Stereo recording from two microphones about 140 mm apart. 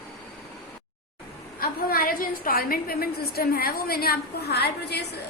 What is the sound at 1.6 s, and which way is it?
A woman's voice, 90° left.